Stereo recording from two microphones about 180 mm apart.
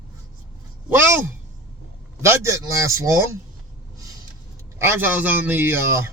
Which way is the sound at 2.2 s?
15° right (ahead or behind).